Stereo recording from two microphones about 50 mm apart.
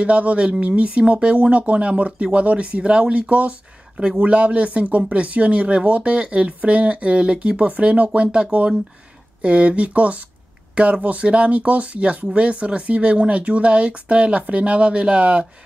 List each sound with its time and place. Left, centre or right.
0.0 s speech: right